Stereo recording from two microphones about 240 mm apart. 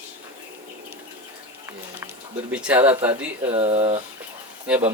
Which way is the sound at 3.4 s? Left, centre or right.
Right.